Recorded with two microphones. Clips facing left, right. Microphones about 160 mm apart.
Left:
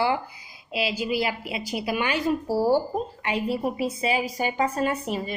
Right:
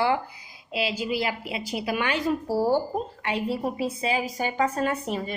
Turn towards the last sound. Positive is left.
turn(degrees=15)  # may be behind; listen again after turning